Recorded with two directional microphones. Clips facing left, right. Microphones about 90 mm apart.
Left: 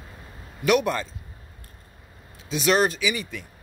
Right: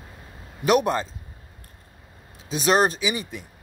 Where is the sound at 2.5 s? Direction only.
30° right (ahead or behind).